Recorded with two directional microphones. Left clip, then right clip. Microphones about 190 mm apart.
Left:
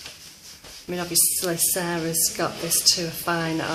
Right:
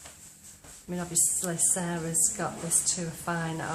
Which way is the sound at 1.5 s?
50° left (ahead or behind).